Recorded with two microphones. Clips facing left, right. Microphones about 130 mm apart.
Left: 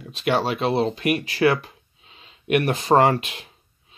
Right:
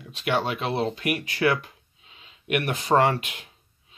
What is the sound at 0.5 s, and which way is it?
Speech, 20° left (ahead or behind).